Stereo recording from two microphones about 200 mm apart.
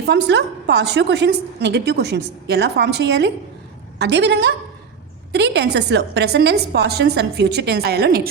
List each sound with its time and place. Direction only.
0.1 s a woman's voice: 60° right (ahead or behind)